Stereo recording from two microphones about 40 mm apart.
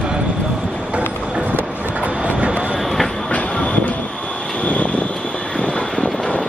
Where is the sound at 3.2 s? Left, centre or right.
Left.